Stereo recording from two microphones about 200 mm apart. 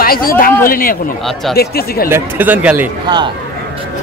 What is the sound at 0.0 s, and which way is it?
Speech, 45° left (ahead or behind).